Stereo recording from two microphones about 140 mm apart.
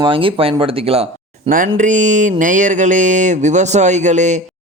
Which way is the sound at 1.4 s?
75° right (ahead or behind).